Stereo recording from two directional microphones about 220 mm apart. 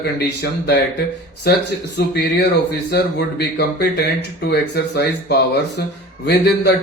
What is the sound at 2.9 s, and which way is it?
Speech, 50° left (ahead or behind).